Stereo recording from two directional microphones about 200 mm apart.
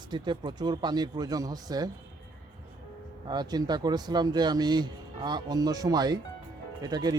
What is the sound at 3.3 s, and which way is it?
Speech, 20° right (ahead or behind).